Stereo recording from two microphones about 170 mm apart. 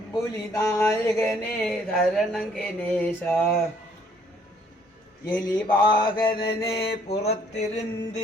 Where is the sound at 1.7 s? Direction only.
Centre (ahead or behind).